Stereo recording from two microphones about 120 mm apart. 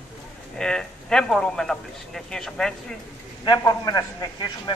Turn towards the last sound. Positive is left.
turn(degrees=35)  # may be behind; listen again after turning